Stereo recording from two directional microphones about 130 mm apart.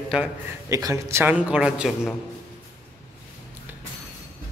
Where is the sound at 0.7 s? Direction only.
25° right (ahead or behind); by 2.1 s 5° right (ahead or behind).